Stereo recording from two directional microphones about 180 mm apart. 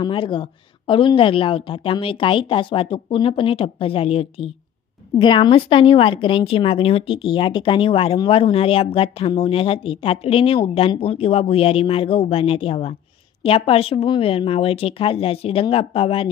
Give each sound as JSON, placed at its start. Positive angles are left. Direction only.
{"t": 0.0, "sound": "a woman's voice", "side_deg": 30}